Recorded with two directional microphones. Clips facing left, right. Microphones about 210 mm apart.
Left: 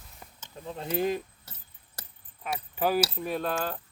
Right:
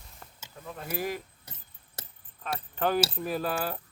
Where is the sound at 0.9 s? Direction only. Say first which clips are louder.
Left 5 dB; 25° left (ahead or behind).